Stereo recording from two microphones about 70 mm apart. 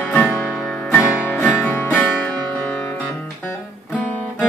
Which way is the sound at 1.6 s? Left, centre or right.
Left.